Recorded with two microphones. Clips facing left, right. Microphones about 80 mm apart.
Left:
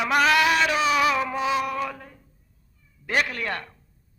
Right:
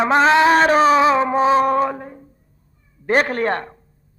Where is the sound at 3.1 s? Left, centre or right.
Right.